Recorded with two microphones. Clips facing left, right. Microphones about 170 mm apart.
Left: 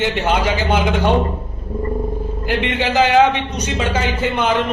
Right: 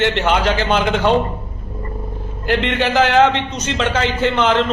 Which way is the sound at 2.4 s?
10° left (ahead or behind).